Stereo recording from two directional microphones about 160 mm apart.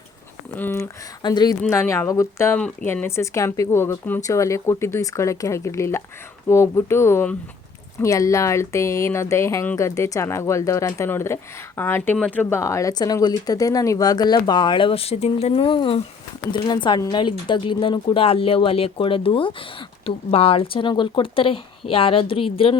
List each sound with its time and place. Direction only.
0.5 s a woman's voice: 15° left (ahead or behind)
1.2 s speech: 25° left (ahead or behind)
1.7 s a woman's voice: 15° left (ahead or behind); by 22.7 s 35° left (ahead or behind)